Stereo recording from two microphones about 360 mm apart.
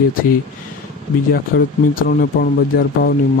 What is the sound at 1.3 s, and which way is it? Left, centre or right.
Speech, left.